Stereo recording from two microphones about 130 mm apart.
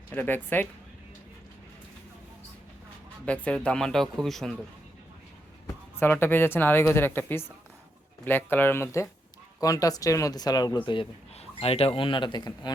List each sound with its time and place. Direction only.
0.1 s speech: 15° left (ahead or behind)
3.2 s speech: 10° left (ahead or behind)
5.6 s speech: 15° left (ahead or behind); by 12.7 s 35° left (ahead or behind)